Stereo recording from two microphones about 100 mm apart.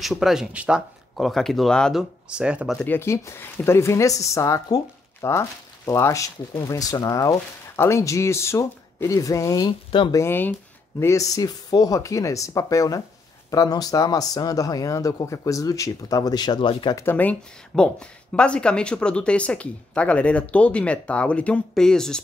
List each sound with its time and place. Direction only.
0.0 s speech: centre (ahead or behind)
1.1 s speech: 5° left (ahead or behind)
2.0 s speech: 10° right (ahead or behind)
2.8 s speech: 20° left (ahead or behind); by 9.8 s 35° left (ahead or behind)
9.8 s speech: 55° left (ahead or behind)
10.1 s speech: 25° left (ahead or behind); by 16.9 s 50° left (ahead or behind)
17.0 s speech: 20° left (ahead or behind)